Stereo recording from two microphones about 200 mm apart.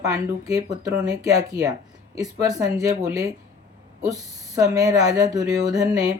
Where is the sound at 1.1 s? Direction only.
15° right (ahead or behind).